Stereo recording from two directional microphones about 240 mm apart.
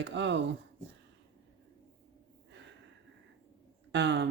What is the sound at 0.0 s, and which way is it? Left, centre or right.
Speech, right.